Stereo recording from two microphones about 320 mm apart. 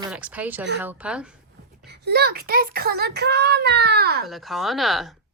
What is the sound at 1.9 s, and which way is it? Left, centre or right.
A child's voice, right.